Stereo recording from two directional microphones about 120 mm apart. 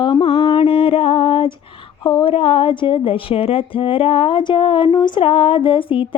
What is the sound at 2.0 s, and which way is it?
Speech, 35° left (ahead or behind).